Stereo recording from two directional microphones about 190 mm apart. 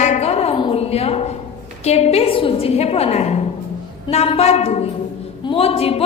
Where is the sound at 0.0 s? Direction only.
35° left (ahead or behind).